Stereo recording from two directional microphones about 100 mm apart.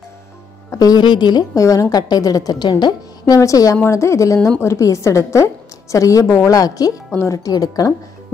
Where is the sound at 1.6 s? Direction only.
35° left (ahead or behind).